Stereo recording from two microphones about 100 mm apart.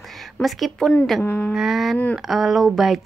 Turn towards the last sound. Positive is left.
turn(degrees=0)  # may be behind; listen again after turning